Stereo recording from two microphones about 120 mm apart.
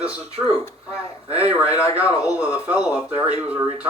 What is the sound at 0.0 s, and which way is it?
Speech, 10° right (ahead or behind).